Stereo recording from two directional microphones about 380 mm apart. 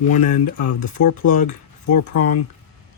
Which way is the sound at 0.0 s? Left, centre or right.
Centre.